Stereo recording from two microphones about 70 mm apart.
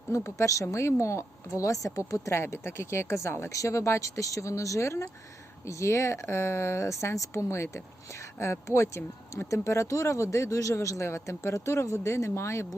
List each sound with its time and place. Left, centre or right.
0.3 s speech: left
3.5 s speech: left